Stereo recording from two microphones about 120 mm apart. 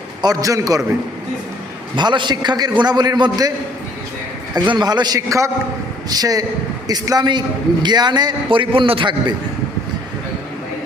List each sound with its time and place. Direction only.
0.2 s a man's voice: 30° right (ahead or behind)
2.0 s a man's voice: 40° right (ahead or behind)
4.7 s a man's voice: 40° right (ahead or behind)